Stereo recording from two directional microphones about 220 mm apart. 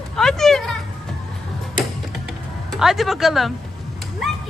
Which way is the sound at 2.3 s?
Centre (ahead or behind).